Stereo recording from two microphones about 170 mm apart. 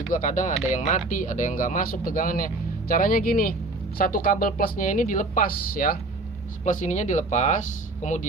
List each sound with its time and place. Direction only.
0.1 s speech: 50° left (ahead or behind)
6.7 s speech: 45° left (ahead or behind)